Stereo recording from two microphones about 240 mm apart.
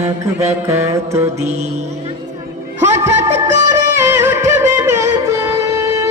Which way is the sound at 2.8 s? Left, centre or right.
Centre.